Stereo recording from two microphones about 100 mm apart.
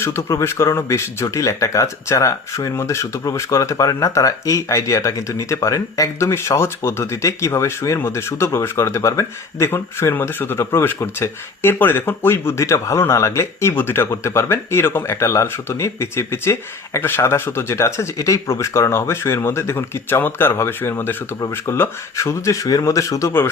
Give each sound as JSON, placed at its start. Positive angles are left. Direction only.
{"t": 0.0, "sound": "speech", "side_deg": 30}